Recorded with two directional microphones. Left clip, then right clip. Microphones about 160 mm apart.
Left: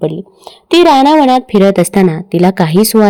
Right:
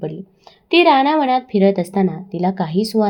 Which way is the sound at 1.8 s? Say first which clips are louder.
Left 9 dB; 55° left (ahead or behind).